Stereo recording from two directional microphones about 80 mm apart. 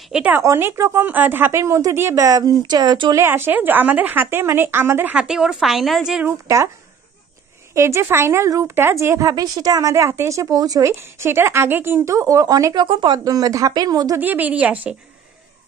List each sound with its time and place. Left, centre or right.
0.4 s a woman's voice: right
3.2 s a woman's voice: right
5.1 s a woman's voice: centre
6.4 s speech: right
7.7 s speech: right
9.3 s speech: right
10.9 s speech: right
12.1 s speech: right
12.7 s speech: right
13.2 s speech: right
14.1 s a woman's voice: right